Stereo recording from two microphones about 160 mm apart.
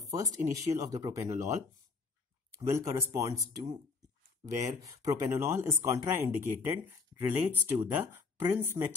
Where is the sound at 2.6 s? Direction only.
20° right (ahead or behind).